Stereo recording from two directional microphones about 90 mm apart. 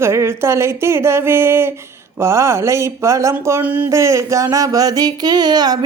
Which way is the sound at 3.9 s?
35° right (ahead or behind).